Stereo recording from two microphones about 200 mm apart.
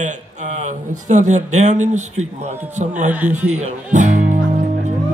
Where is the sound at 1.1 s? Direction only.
35° right (ahead or behind).